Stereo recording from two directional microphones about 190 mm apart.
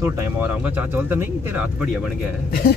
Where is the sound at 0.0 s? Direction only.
10° right (ahead or behind).